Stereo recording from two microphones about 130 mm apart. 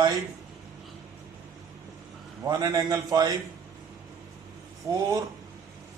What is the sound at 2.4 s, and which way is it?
Speech, 30° right (ahead or behind).